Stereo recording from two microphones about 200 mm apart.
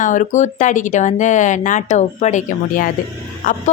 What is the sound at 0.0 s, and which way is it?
Speech, 40° left (ahead or behind).